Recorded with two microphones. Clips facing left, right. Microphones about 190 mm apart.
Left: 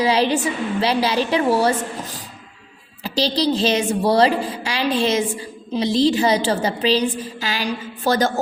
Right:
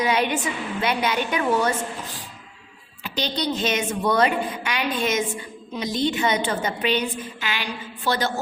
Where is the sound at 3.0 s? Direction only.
35° left (ahead or behind).